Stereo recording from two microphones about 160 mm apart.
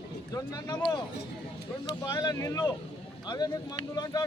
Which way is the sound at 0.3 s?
25° left (ahead or behind).